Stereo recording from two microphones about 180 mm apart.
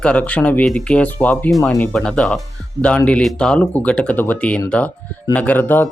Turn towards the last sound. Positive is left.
turn(degrees=10)  # may be behind; listen again after turning